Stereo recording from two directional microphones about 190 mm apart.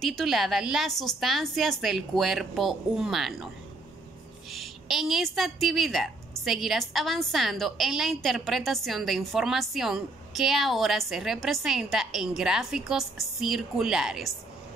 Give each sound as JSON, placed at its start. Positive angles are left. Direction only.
{"t": 0.0, "sound": "a woman's voice", "side_deg": 0}
{"t": 4.5, "sound": "a woman's voice", "side_deg": 0}